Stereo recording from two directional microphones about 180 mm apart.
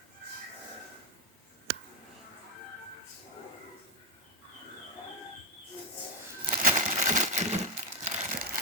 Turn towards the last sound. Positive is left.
turn(degrees=-40)  # may be behind; listen again after turning